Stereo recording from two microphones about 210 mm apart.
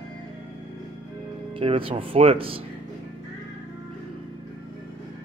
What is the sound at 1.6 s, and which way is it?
Speech, 25° right (ahead or behind).